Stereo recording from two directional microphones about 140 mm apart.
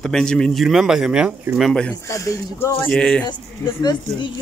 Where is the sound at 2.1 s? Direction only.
20° left (ahead or behind).